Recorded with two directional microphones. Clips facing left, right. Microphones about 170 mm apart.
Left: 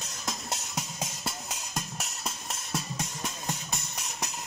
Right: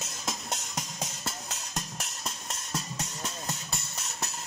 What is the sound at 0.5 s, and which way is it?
Music, 10° left (ahead or behind).